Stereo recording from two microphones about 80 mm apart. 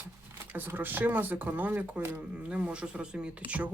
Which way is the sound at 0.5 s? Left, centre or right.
Right.